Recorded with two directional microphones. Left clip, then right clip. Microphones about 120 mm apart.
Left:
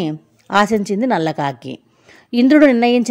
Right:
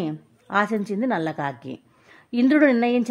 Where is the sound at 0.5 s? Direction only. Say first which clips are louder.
Left 8 dB; 40° left (ahead or behind).